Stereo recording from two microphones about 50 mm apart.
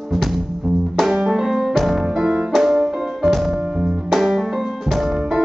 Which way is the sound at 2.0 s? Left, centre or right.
Centre.